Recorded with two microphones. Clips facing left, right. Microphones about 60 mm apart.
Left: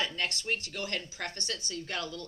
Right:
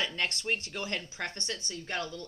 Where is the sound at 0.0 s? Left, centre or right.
Right.